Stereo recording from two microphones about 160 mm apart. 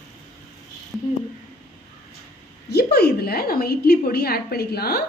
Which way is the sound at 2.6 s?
85° left.